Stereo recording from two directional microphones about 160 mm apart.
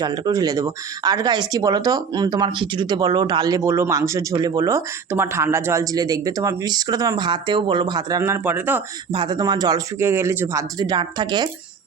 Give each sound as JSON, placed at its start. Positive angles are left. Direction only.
{"t": 0.0, "sound": "speech", "side_deg": -25}
{"t": 9.1, "sound": "speech", "side_deg": -30}